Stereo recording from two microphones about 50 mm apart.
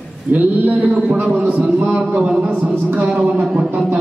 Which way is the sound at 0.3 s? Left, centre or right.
Right.